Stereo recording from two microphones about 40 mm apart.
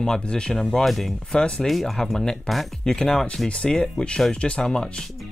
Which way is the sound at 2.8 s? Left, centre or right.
Centre.